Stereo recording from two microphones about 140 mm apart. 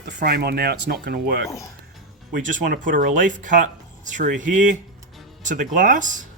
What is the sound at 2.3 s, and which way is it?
Speech, 70° right (ahead or behind).